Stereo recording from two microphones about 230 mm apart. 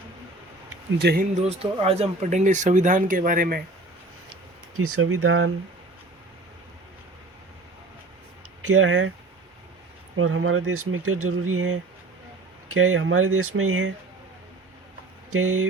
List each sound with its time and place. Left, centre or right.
0.9 s speech: right
1.5 s speech: right
4.8 s speech: right
8.6 s speech: right
10.2 s speech: right
15.3 s speech: right